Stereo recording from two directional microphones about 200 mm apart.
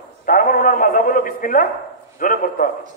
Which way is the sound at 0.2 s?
45° left (ahead or behind).